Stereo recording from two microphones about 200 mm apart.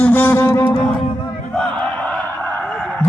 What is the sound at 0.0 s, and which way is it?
Music, 10° left (ahead or behind).